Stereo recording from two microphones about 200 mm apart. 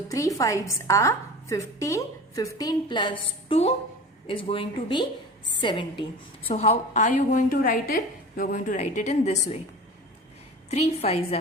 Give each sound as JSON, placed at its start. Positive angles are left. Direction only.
{"t": 0.1, "sound": "a woman's voice", "side_deg": 15}
{"t": 10.7, "sound": "a woman's voice", "side_deg": 30}